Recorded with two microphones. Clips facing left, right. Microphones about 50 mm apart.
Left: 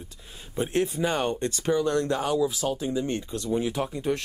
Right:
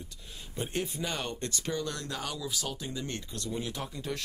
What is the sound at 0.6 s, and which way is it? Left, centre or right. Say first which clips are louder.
Speech: left 8 dB; centre.